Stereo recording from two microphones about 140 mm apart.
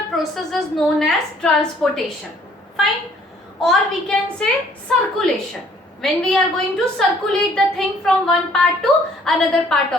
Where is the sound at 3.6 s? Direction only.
5° left (ahead or behind).